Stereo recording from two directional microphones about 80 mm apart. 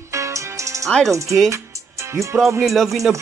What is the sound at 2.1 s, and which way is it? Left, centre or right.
Speech, right.